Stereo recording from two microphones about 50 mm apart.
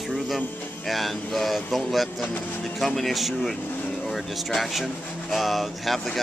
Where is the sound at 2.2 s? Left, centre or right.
Left.